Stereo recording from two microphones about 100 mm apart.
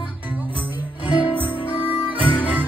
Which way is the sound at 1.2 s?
15° right (ahead or behind).